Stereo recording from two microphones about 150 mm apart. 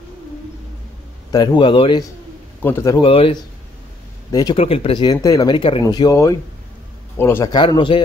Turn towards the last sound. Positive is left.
turn(degrees=30)  # may be behind; listen again after turning